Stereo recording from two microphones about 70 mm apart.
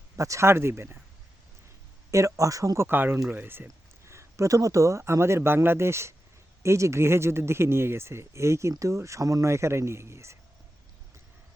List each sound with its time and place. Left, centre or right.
0.2 s speech: right
2.0 s speech: right
2.8 s speech: right
4.0 s speech: right